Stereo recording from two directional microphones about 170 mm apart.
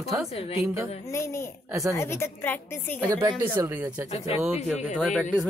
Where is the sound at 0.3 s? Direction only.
35° left (ahead or behind).